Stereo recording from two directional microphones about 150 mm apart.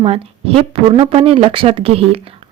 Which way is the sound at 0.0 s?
40° right (ahead or behind).